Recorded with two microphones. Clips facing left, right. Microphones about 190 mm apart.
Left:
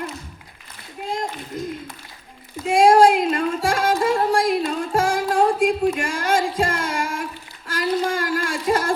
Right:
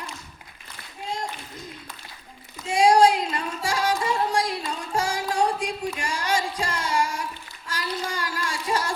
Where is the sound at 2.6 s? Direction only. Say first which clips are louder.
Left 4 dB; 50° left (ahead or behind).